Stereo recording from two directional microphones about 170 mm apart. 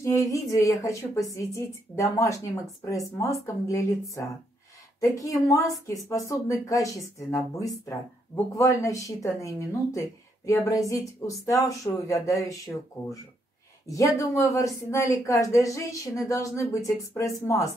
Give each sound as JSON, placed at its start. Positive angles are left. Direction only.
{"t": 0.0, "sound": "speech", "side_deg": 20}
{"t": 5.0, "sound": "speech", "side_deg": 20}